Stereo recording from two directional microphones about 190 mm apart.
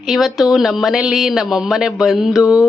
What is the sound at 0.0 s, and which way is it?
Speech, centre (ahead or behind).